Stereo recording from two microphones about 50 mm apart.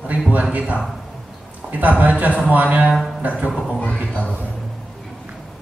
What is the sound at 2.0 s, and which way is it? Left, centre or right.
A woman's voice, right.